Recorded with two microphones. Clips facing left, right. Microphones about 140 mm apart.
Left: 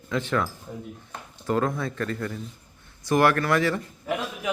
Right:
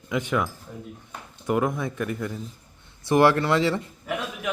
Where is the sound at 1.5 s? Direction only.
15° right (ahead or behind).